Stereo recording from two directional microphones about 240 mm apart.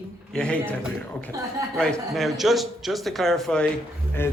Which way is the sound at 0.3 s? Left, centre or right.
Centre.